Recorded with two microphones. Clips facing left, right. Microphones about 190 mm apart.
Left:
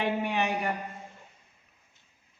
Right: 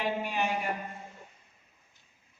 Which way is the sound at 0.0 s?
65° left (ahead or behind).